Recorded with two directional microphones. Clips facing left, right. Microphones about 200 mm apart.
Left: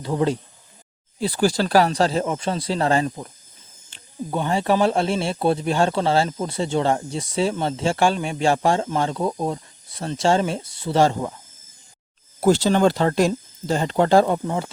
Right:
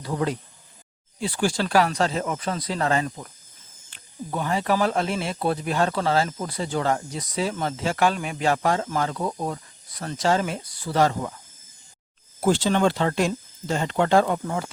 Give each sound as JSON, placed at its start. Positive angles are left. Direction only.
{"t": 0.0, "sound": "speech", "side_deg": 25}
{"t": 1.2, "sound": "speech", "side_deg": 35}
{"t": 12.4, "sound": "speech", "side_deg": 40}